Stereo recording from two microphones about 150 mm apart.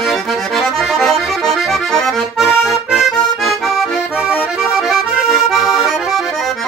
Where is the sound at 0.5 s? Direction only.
Centre (ahead or behind).